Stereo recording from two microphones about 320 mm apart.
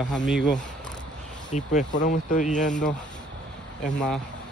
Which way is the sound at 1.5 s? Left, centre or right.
Left.